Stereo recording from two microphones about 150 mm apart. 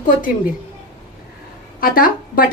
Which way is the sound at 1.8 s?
70° left (ahead or behind).